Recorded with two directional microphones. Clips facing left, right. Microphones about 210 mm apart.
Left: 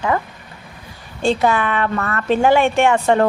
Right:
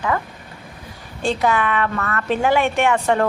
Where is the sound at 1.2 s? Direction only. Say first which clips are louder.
Left 3 dB; 30° left (ahead or behind).